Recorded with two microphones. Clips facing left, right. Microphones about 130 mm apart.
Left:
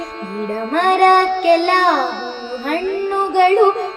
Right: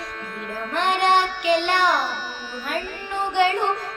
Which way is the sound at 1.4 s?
55° left (ahead or behind).